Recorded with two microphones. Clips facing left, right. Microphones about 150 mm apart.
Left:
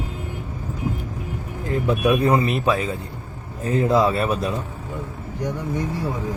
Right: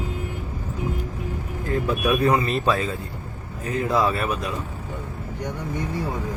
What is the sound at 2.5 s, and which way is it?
Speech, 10° left (ahead or behind).